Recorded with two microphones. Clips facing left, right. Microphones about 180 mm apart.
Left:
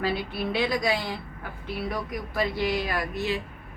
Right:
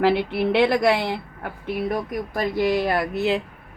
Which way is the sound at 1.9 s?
45° right (ahead or behind).